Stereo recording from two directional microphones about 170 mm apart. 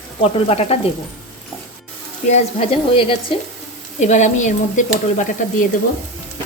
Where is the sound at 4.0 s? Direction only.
45° left (ahead or behind).